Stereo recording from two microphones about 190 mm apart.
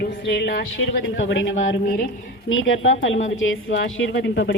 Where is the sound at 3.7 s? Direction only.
70° left (ahead or behind).